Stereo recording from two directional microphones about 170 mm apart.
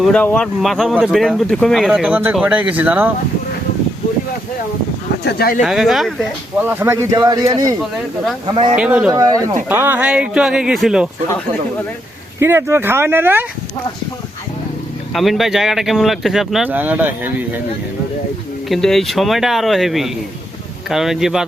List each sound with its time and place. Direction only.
0.0 s speech: 5° left (ahead or behind); by 3.1 s 10° right (ahead or behind)
5.2 s speech: 65° left (ahead or behind)
5.6 s speech: centre (ahead or behind)
6.7 s speech: 15° right (ahead or behind); by 8.7 s 30° right (ahead or behind)
8.8 s speech: 5° right (ahead or behind)
9.1 s speech: 20° right (ahead or behind); by 11.1 s 5° right (ahead or behind)
12.4 s speech: 15° right (ahead or behind)
15.1 s speech: centre (ahead or behind)
18.7 s speech: centre (ahead or behind)